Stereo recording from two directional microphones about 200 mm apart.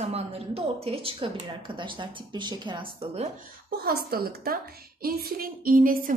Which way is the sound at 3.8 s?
50° right (ahead or behind).